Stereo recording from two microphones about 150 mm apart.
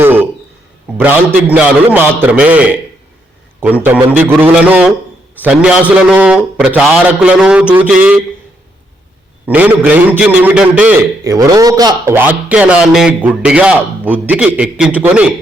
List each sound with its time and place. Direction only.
0.0 s a sound: 15° right (ahead or behind)
0.9 s a man's voice: 10° right (ahead or behind)
3.8 s a man's voice: 10° right (ahead or behind)
9.5 s a man's voice: 10° right (ahead or behind)
11.2 s speech: 20° right (ahead or behind)
12.1 s a man's voice: 15° right (ahead or behind)